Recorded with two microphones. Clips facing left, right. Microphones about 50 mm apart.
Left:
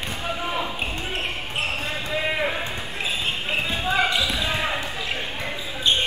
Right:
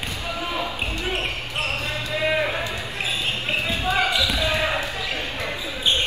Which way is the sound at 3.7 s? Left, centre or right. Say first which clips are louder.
Even; left.